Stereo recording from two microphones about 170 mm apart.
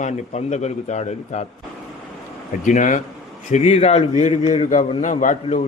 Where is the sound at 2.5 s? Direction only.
50° left (ahead or behind).